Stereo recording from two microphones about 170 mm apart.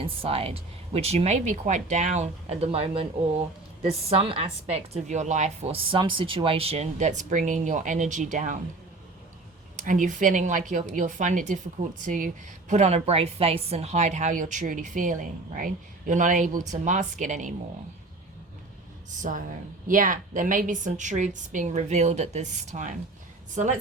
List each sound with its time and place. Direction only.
0.0 s a woman's voice: 35° right (ahead or behind)
9.7 s a woman's voice: 50° right (ahead or behind)
19.3 s a woman's voice: 45° right (ahead or behind)